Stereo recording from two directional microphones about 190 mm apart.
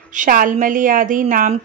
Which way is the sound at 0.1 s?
45° right (ahead or behind).